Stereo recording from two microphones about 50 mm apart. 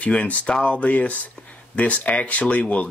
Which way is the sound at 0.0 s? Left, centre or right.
Left.